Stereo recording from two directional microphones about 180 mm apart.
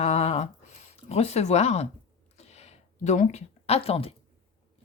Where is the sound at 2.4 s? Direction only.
35° left (ahead or behind).